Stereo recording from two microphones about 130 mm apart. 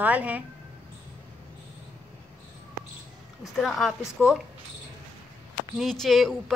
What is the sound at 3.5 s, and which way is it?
Speech, centre (ahead or behind).